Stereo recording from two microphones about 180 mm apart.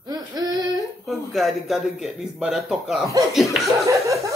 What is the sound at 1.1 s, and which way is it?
Speech, centre (ahead or behind).